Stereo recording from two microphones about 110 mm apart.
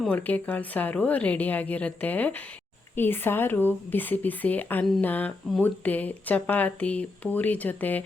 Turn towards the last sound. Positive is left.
turn(degrees=15)  # may be behind; listen again after turning